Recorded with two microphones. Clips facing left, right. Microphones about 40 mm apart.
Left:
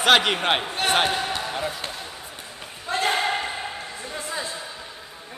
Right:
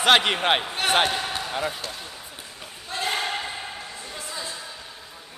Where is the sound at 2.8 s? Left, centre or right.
Left.